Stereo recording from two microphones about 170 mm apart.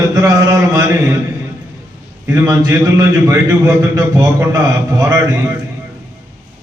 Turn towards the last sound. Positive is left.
turn(degrees=-20)  # may be behind; listen again after turning